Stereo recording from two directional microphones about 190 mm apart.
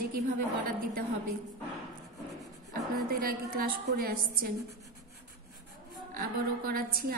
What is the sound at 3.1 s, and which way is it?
A woman's voice, 50° right (ahead or behind).